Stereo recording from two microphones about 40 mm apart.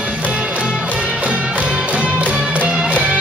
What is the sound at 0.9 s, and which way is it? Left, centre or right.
Music, right.